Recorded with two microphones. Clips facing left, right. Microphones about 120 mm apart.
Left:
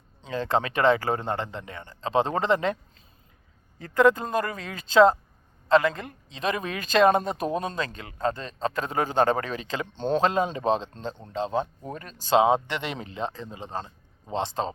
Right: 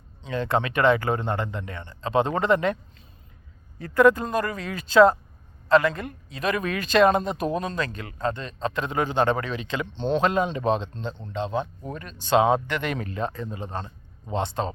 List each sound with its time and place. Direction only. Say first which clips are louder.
0.2 s speech: right 1 dB; 30° left (ahead or behind)
3.9 s speech: right 2 dB; 25° left (ahead or behind)
12.4 s speech: even; 25° left (ahead or behind)